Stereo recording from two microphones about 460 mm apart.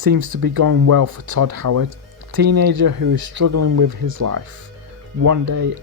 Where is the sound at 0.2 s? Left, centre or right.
Right.